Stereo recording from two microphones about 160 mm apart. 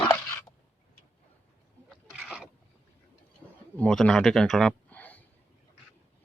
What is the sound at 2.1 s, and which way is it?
Boat, 5° right (ahead or behind).